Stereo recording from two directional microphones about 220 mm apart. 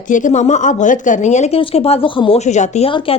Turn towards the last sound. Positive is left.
turn(degrees=25)  # may be behind; listen again after turning